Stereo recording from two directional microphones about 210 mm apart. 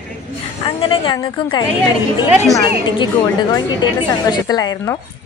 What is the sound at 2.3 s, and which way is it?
Speech, 10° right (ahead or behind).